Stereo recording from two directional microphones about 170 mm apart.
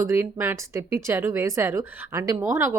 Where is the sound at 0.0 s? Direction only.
15° right (ahead or behind).